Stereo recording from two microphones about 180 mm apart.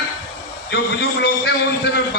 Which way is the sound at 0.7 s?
65° left (ahead or behind).